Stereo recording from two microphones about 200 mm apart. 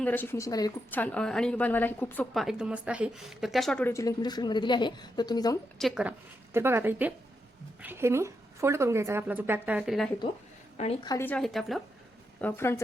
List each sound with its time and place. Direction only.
0.0 s a woman's voice: 10° left (ahead or behind)
2.3 s a woman's voice: centre (ahead or behind); by 5.5 s 20° left (ahead or behind)
5.8 s a woman's voice: 5° right (ahead or behind)
11.0 s a woman's voice: 20° left (ahead or behind)
11.3 s a woman's voice: 5° left (ahead or behind)